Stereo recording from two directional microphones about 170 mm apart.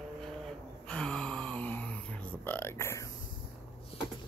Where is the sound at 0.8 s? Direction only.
5° left (ahead or behind).